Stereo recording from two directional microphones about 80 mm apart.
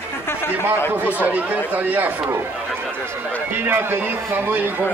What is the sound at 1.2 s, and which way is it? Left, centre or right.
Speech, centre.